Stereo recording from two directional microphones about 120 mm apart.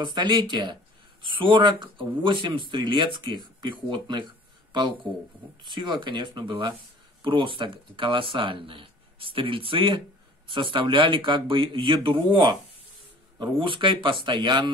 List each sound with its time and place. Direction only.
0.0 s speech: 40° right (ahead or behind)
5.6 s speech: 40° right (ahead or behind)